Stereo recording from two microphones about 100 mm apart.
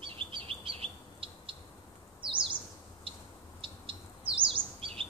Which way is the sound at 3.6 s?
60° right (ahead or behind).